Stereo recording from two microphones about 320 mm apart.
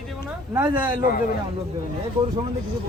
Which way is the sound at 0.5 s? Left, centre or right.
Centre.